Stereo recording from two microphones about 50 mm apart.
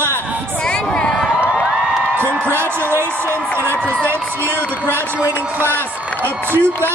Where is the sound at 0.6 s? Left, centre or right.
Centre.